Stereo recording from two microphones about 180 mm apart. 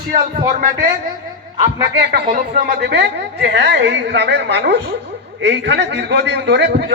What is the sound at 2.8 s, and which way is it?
A man's voice, 70° right (ahead or behind).